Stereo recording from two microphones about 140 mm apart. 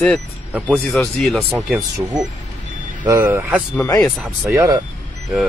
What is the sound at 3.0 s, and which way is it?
Speech, 20° right (ahead or behind).